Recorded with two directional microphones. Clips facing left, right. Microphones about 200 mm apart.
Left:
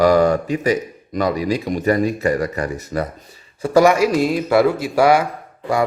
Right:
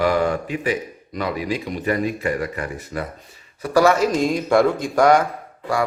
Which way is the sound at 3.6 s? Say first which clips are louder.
Left 4 dB; 25° left (ahead or behind).